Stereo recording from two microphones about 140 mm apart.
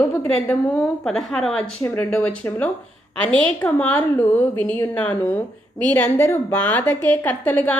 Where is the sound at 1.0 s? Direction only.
5° left (ahead or behind).